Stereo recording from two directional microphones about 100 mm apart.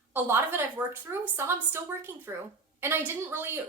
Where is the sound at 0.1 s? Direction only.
20° right (ahead or behind).